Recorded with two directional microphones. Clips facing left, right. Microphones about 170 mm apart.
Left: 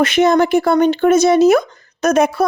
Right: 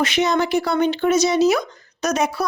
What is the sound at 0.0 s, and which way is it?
Speech, 50° left (ahead or behind).